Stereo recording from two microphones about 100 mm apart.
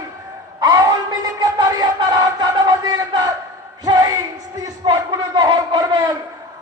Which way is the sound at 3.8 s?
40° right (ahead or behind).